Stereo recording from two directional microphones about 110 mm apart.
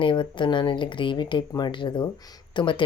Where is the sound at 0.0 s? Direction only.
50° left (ahead or behind).